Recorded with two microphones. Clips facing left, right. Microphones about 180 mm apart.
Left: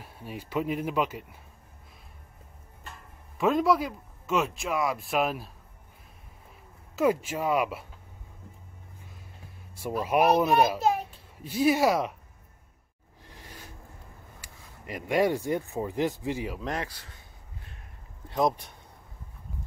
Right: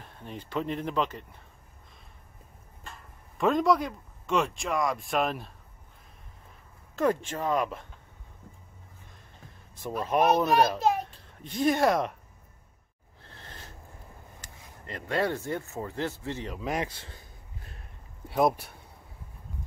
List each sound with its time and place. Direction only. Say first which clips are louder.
0.0 s speech: left 2 dB; 5° left (ahead or behind)
3.3 s speech: even; 5° left (ahead or behind)
7.0 s speech: left 2 dB; 10° left (ahead or behind)
9.8 s a child's voice: left 1 dB; 10° left (ahead or behind)
13.2 s a sound: even; 10° left (ahead or behind)
14.4 s speech: even; 10° left (ahead or behind)
16.7 s speech: right 2 dB; 25° right (ahead or behind)
18.3 s speech: right 1 dB; 5° right (ahead or behind)